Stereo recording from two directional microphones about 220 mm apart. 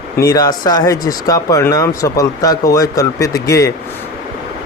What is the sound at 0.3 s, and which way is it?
Speech, 15° left (ahead or behind).